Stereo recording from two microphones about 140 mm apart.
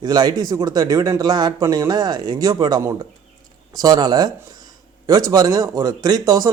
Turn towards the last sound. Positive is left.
turn(degrees=-25)  # may be behind; listen again after turning